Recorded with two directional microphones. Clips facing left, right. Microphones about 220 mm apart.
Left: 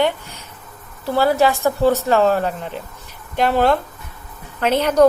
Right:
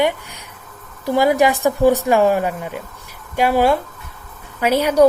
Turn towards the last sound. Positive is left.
turn(degrees=-10)  # may be behind; listen again after turning